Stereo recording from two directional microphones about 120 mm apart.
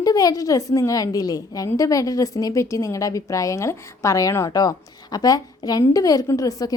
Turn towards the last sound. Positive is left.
turn(degrees=30)  # may be behind; listen again after turning